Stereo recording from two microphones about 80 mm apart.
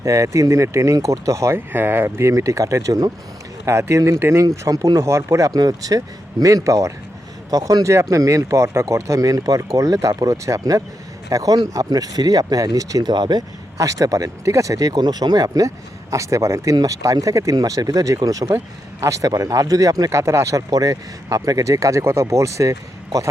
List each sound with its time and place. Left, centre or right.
0.0 s speech: right
1.5 s speech: right
4.4 s speech: right
4.9 s speech: right
13.8 s speech: right